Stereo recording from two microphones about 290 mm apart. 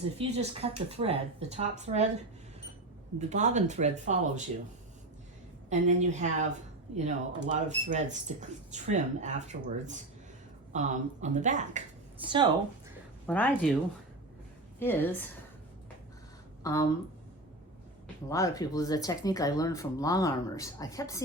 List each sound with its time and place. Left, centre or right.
0.2 s speech: right
3.2 s speech: right
5.6 s speech: right
13.2 s speech: centre
14.8 s a woman's voice: centre
16.7 s speech: centre
18.3 s speech: centre